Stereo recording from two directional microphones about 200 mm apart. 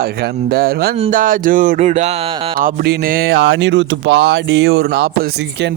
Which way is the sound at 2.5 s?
45° right (ahead or behind).